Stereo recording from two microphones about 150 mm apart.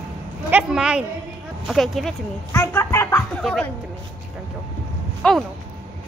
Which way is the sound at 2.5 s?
15° left (ahead or behind).